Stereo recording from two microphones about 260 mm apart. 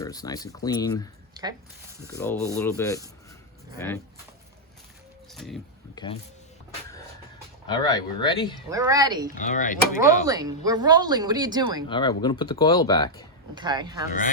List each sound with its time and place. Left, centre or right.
0.0 s speech: centre
1.3 s speech: centre
2.0 s speech: centre
5.3 s speech: centre
5.9 s speech: centre
7.7 s speech: centre
8.7 s speech: centre
9.3 s speech: left
10.2 s speech: centre
11.9 s speech: centre
13.6 s speech: centre